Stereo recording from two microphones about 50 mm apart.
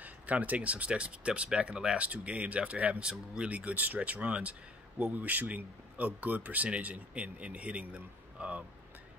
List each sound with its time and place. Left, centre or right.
0.0 s speech: right
3.5 s speech: right